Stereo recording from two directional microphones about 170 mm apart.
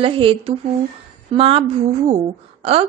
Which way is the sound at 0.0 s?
30° right (ahead or behind).